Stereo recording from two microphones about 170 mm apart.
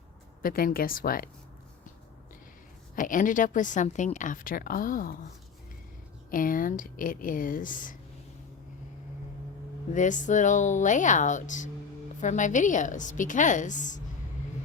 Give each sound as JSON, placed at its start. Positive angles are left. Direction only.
{"t": 0.4, "sound": "speech", "side_deg": 60}
{"t": 2.9, "sound": "a woman's voice", "side_deg": 50}
{"t": 6.3, "sound": "a woman's voice", "side_deg": 55}
{"t": 9.9, "sound": "a woman's voice", "side_deg": 45}